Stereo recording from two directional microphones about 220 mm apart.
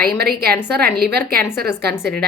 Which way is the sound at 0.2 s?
45° right (ahead or behind).